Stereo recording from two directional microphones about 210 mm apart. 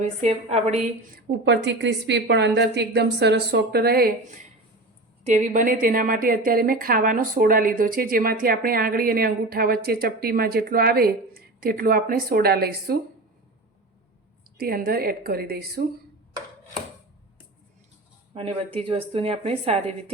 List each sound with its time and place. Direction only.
0.2 s a woman's voice: 30° right (ahead or behind)
1.1 s a woman's voice: 55° right (ahead or behind)
5.2 s a woman's voice: 35° right (ahead or behind)
14.6 s a woman's voice: 45° right (ahead or behind)
18.3 s speech: 25° right (ahead or behind)